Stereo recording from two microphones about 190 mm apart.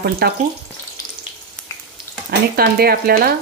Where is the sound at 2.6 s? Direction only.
50° right (ahead or behind).